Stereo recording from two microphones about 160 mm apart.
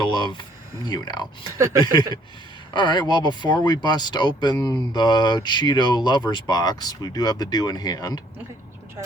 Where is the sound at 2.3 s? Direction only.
30° left (ahead or behind).